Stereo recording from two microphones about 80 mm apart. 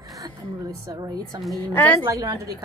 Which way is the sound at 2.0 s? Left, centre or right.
Right.